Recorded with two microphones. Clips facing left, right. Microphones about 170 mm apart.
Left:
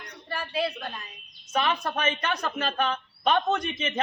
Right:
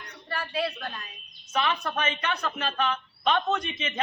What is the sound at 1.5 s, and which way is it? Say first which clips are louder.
Speech: left 1 dB; 40° left (ahead or behind).